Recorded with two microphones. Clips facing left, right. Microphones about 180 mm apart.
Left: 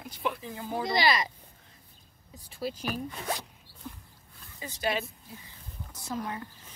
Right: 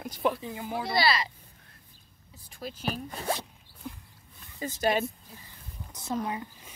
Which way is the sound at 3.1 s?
35° right (ahead or behind).